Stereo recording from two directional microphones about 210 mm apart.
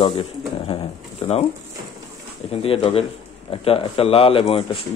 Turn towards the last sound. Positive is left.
turn(degrees=25)  # may be behind; listen again after turning